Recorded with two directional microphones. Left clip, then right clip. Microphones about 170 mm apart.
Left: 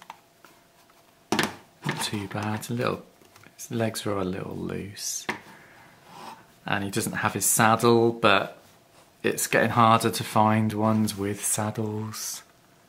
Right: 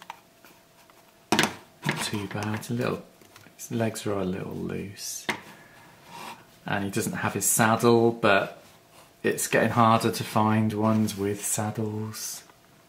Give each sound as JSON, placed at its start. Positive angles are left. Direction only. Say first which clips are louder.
{"t": 1.3, "sound": "a sound", "louder": "right 2 dB", "side_deg": 5}
{"t": 2.0, "sound": "speech", "louder": "left 1 dB", "side_deg": 35}
{"t": 6.6, "sound": "speech", "louder": "left 1 dB", "side_deg": 30}